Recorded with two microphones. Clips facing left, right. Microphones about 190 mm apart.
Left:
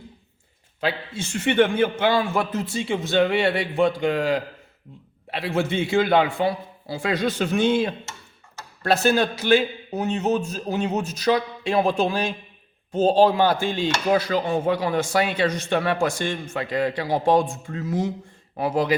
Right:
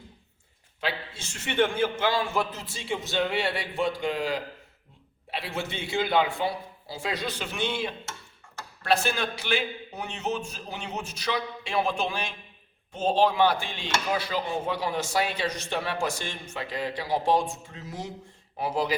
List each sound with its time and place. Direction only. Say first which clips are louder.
0.8 s a man's voice: left 6 dB; 50° left (ahead or behind)
5.3 s chopping: left 9 dB; 55° left (ahead or behind)
8.9 s a man's voice: left 6 dB; 40° left (ahead or behind)
13.0 s chopping: left 5 dB; 40° left (ahead or behind)
18.5 s a man's voice: left 6 dB; 55° left (ahead or behind)